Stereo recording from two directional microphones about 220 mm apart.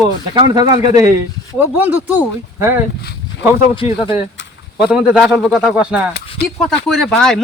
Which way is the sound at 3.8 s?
25° left (ahead or behind).